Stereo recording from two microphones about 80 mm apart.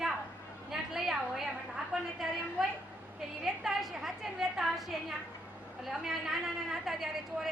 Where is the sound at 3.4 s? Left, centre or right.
Centre.